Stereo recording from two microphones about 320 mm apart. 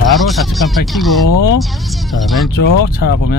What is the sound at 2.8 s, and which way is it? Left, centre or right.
Speech, left.